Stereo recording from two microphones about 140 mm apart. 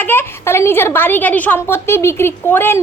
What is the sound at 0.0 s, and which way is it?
A woman's voice, 15° left (ahead or behind).